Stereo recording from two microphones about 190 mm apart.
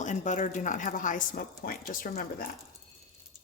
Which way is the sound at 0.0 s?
40° left (ahead or behind).